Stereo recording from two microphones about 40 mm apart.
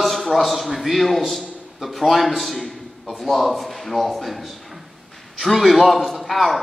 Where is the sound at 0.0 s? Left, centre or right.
Centre.